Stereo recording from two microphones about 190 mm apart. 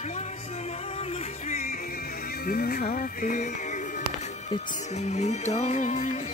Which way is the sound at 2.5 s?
55° left (ahead or behind).